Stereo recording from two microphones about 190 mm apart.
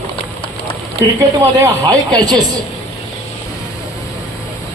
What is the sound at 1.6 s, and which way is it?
Speech, 20° right (ahead or behind).